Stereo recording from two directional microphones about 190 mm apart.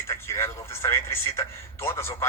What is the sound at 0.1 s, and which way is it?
A man's voice, 15° left (ahead or behind).